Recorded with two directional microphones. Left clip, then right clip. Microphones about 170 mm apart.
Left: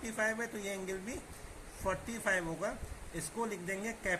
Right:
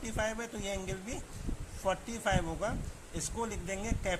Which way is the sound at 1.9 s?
50° right (ahead or behind).